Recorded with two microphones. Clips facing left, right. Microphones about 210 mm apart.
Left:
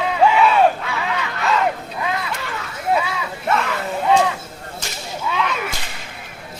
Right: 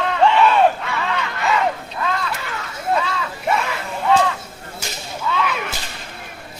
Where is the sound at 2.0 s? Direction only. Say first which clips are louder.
Right 1 dB; 15° left (ahead or behind).